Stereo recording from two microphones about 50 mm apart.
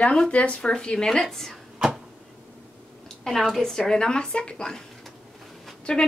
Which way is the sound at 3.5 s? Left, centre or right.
Centre.